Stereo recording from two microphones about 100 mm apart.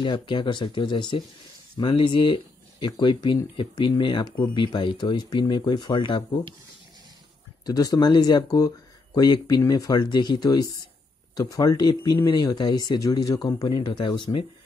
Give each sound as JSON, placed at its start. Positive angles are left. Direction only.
{"t": 0.0, "sound": "speech", "side_deg": 55}
{"t": 7.6, "sound": "speech", "side_deg": 40}
{"t": 13.7, "sound": "speech", "side_deg": 50}